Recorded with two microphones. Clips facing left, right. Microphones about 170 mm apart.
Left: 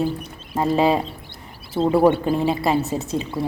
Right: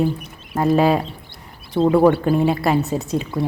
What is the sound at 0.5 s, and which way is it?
Speech, 25° left (ahead or behind).